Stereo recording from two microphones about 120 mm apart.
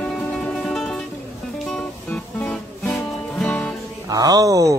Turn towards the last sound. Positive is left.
turn(degrees=-30)  # may be behind; listen again after turning